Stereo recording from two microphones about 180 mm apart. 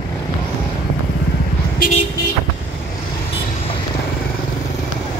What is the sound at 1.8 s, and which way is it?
Vehicle, 55° left (ahead or behind).